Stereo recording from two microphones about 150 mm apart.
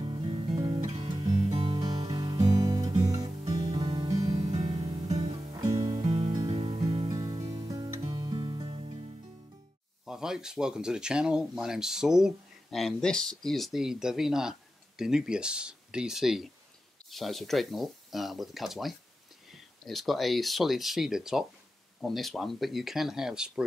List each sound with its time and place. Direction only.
0.0 s music: 35° right (ahead or behind)
1.8 s music: 25° right (ahead or behind)
3.4 s music: 40° right (ahead or behind)
5.5 s music: 25° right (ahead or behind)
6.0 s music: 40° right (ahead or behind)
10.0 s speech: 5° right (ahead or behind)